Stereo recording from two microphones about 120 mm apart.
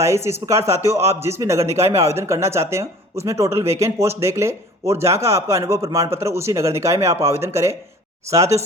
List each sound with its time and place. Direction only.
0.0 s speech: 25° right (ahead or behind)